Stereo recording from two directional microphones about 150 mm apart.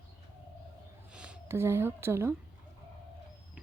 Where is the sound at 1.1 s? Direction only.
5° right (ahead or behind).